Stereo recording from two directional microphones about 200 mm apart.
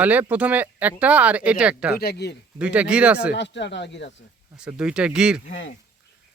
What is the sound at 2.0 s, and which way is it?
Speech, 55° left (ahead or behind).